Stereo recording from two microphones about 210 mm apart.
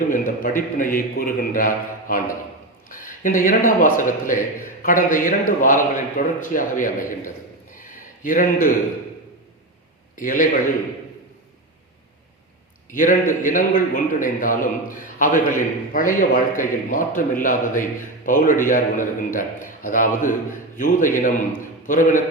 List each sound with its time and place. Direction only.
0.1 s a man's voice: 40° left (ahead or behind)
10.2 s a man's voice: 40° left (ahead or behind)
12.9 s a man's voice: 40° left (ahead or behind)